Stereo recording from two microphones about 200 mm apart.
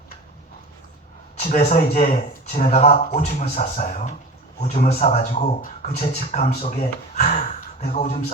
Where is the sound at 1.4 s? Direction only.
35° left (ahead or behind).